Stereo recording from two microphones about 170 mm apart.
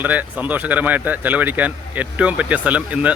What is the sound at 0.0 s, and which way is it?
Speech, 10° right (ahead or behind).